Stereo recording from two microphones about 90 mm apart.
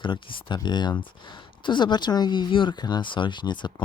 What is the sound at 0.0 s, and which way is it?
A woman's voice, 70° left (ahead or behind).